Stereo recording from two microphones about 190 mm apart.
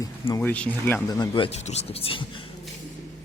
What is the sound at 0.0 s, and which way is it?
Speech, 15° left (ahead or behind).